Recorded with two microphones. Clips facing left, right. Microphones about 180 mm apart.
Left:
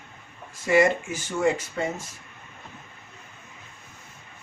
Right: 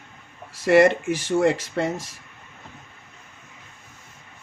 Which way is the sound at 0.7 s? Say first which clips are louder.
Right 5 dB; 75° right (ahead or behind).